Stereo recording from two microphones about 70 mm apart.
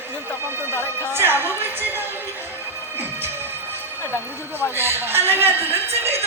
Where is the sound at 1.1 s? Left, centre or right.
Right.